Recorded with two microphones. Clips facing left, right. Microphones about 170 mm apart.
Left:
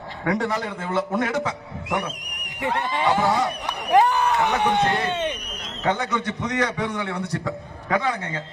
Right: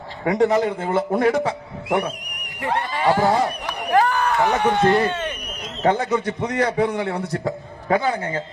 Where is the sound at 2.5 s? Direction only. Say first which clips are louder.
Right 1 dB; 20° left (ahead or behind).